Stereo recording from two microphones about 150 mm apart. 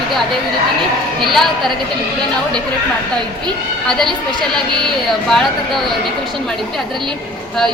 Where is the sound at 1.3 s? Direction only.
Centre (ahead or behind).